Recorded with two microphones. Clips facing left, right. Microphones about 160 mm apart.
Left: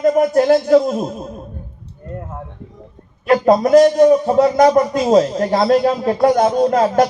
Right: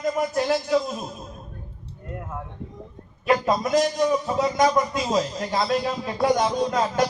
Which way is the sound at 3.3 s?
60° left (ahead or behind).